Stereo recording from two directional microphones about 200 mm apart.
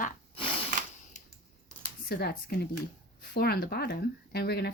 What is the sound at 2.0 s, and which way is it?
Speech, 50° left (ahead or behind).